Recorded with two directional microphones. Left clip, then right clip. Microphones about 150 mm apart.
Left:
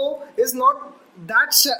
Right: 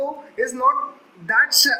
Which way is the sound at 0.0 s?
30° left (ahead or behind).